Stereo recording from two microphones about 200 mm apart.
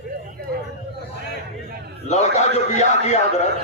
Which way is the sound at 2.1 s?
35° left (ahead or behind).